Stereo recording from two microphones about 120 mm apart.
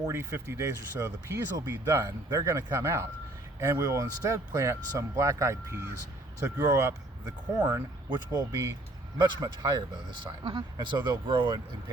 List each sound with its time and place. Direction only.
0.1 s speech: 20° right (ahead or behind); by 11.6 s 40° right (ahead or behind)